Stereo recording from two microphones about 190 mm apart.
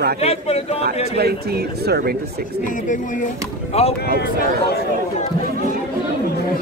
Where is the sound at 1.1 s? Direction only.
55° right (ahead or behind).